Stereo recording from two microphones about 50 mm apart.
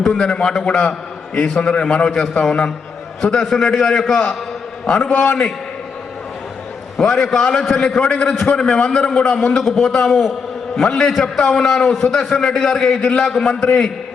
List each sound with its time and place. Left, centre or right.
0.0 s a man's voice: centre
5.0 s a man's voice: left
7.0 s a man's voice: centre
9.6 s a man's voice: centre
13.5 s a man's voice: centre